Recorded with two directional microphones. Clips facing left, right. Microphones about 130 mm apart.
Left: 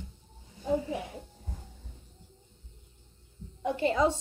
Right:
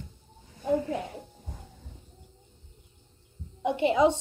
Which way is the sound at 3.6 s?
20° right (ahead or behind).